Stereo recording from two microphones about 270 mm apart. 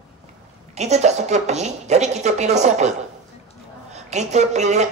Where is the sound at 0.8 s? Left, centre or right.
Right.